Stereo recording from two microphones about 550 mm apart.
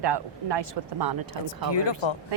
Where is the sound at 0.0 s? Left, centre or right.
Right.